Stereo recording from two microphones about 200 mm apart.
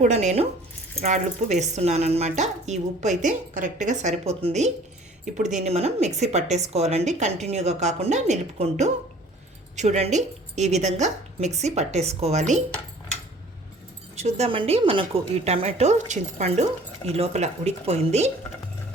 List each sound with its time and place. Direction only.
0.0 s a woman's voice: 35° right (ahead or behind)
14.2 s a woman's voice: 35° right (ahead or behind)